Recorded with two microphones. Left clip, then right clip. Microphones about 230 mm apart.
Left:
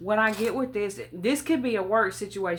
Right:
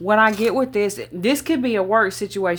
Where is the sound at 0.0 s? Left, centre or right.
Right.